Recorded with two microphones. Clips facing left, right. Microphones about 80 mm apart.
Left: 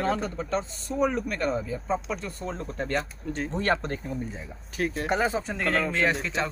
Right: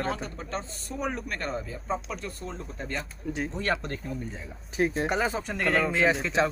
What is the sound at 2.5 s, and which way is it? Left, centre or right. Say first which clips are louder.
Speech: left 5 dB; left.